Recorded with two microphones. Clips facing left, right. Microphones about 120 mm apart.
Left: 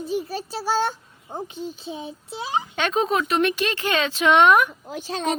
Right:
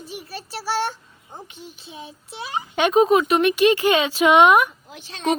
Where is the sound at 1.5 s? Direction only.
30° left (ahead or behind).